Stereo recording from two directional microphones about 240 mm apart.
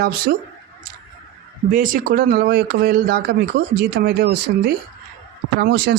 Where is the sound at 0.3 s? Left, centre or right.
Right.